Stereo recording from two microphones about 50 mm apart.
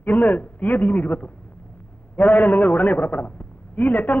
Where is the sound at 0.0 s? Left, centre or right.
Left.